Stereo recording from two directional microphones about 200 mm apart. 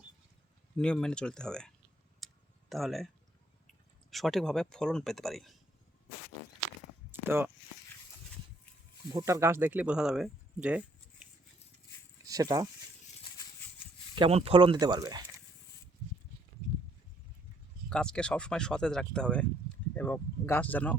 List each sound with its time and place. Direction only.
0.8 s speech: 5° left (ahead or behind)
2.2 s clicking: centre (ahead or behind)
4.1 s speech: centre (ahead or behind)
7.1 s a sound: 10° right (ahead or behind)
9.1 s speech: 15° right (ahead or behind)
12.2 s speech: 20° right (ahead or behind)
14.2 s speech: 30° right (ahead or behind)
17.8 s speech: 5° left (ahead or behind)